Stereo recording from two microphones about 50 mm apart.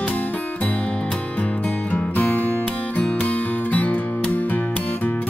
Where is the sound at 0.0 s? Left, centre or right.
Left.